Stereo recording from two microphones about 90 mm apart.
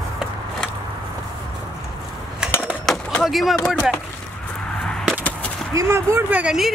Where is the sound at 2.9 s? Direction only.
Centre (ahead or behind).